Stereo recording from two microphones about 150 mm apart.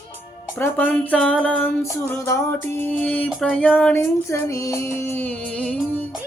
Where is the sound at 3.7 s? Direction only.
10° left (ahead or behind).